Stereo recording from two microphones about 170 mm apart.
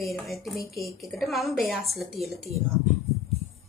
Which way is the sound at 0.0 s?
Centre (ahead or behind).